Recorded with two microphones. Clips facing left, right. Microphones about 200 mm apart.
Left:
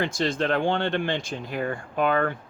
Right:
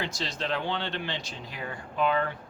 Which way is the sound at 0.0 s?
50° left (ahead or behind).